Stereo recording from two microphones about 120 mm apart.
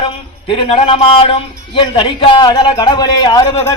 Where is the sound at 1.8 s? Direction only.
45° left (ahead or behind).